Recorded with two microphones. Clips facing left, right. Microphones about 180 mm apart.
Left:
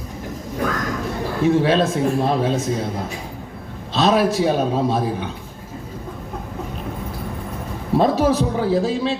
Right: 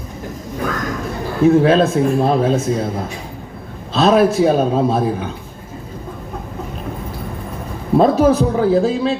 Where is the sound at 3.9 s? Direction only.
50° right (ahead or behind).